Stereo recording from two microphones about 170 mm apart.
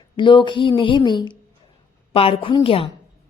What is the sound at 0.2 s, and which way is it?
A woman's voice, 30° left (ahead or behind).